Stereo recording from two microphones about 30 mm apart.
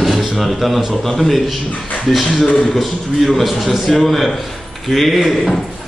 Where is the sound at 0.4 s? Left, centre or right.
Centre.